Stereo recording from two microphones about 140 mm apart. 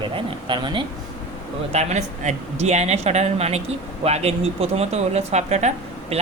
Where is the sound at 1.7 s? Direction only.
55° right (ahead or behind).